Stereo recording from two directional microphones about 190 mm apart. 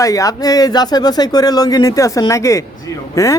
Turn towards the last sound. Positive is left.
turn(degrees=15)  # may be behind; listen again after turning